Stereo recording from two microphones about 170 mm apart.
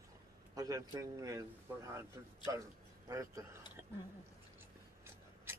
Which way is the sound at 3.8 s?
15° right (ahead or behind).